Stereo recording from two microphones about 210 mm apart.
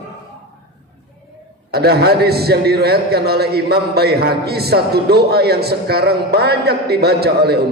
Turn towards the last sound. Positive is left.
turn(degrees=-50)  # may be behind; listen again after turning